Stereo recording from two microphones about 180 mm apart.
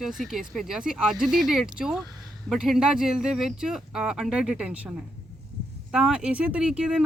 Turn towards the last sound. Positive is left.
turn(degrees=-5)  # may be behind; listen again after turning